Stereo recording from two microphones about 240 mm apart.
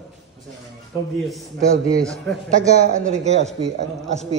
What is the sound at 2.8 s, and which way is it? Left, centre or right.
A man's voice, right.